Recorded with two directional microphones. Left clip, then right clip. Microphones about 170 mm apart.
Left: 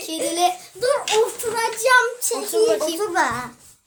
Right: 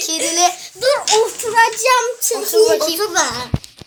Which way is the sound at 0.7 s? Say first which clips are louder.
Right 5 dB; 20° right (ahead or behind).